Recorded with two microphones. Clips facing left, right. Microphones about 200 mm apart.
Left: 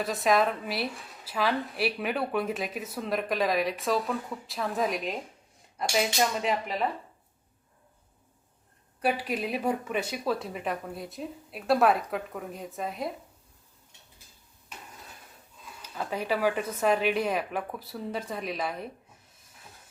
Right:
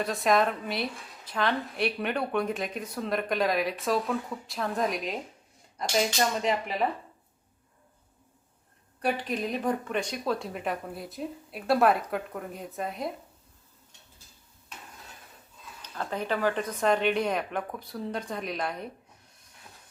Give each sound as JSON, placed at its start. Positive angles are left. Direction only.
{"t": 0.0, "sound": "a woman's voice", "side_deg": 0}
{"t": 9.0, "sound": "a woman's voice", "side_deg": 5}
{"t": 15.8, "sound": "a woman's voice", "side_deg": 5}